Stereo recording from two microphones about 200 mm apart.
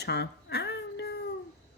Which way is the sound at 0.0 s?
55° left (ahead or behind).